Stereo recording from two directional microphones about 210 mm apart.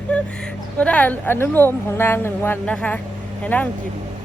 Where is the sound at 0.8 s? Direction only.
5° left (ahead or behind).